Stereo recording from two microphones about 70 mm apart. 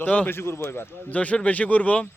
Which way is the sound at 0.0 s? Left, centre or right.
Centre.